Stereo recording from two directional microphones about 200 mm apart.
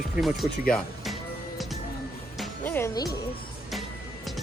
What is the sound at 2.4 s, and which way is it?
Music, 10° left (ahead or behind).